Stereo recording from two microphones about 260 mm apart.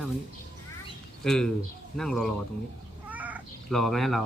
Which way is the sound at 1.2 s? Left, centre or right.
Centre.